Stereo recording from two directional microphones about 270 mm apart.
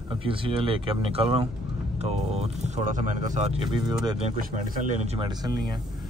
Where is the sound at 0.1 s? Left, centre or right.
Centre.